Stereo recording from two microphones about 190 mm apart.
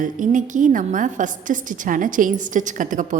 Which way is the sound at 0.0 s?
45° right (ahead or behind).